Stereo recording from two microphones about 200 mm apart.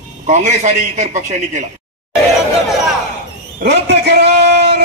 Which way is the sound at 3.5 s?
55° right (ahead or behind).